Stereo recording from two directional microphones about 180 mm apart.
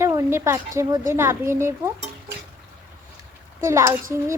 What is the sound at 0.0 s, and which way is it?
Speech, 15° right (ahead or behind).